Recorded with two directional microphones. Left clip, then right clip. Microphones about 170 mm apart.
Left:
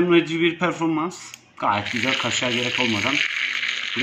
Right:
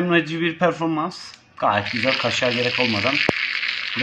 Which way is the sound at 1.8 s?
15° right (ahead or behind).